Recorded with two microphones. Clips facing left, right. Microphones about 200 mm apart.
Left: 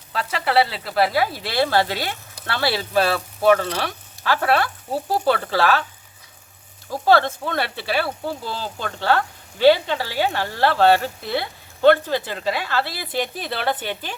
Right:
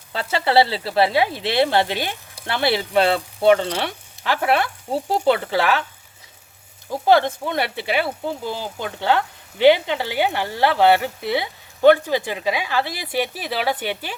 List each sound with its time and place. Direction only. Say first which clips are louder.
0.1 s speech: right 2 dB; 25° right (ahead or behind)
7.0 s speech: right 1 dB; 15° right (ahead or behind)